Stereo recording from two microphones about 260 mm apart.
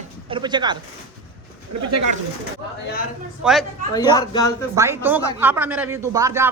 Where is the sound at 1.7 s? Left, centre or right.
Right.